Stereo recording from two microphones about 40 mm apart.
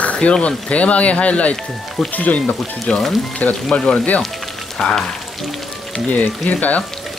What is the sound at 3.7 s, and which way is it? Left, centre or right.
Speech, left.